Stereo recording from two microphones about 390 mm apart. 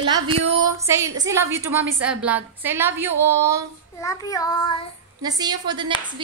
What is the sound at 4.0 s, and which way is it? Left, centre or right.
Speech, centre.